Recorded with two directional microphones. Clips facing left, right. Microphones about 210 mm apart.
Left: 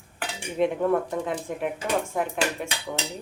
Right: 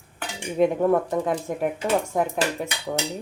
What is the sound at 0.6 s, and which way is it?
Speech, 45° right (ahead or behind).